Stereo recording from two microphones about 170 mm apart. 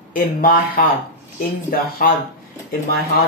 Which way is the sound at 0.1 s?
55° left (ahead or behind).